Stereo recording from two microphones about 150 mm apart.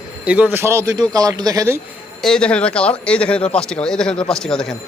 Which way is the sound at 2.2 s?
5° left (ahead or behind).